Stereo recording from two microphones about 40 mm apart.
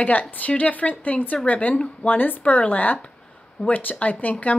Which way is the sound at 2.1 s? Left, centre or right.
Left.